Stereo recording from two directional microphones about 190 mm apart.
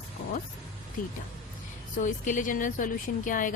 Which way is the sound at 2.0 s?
40° left (ahead or behind).